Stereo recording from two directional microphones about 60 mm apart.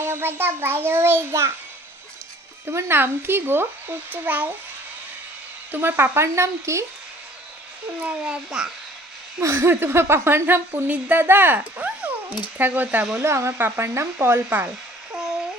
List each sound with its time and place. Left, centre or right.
0.0 s a child's voice: right
2.7 s a child's voice: right
5.7 s speech: right
8.0 s a child's voice: right
8.4 s a child's voice: centre
9.4 s speech: right
10.8 s a child's voice: right
11.2 s a child's voice: right
13.1 s speech: right